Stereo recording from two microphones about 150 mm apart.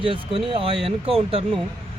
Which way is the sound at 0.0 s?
35° right (ahead or behind).